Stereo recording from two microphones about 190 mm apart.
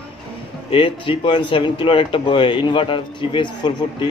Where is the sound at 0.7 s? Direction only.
25° left (ahead or behind).